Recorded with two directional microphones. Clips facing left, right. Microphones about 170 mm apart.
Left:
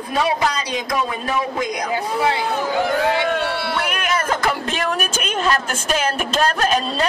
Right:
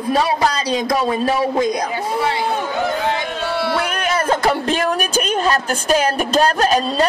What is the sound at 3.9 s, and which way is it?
A man's voice, 35° right (ahead or behind).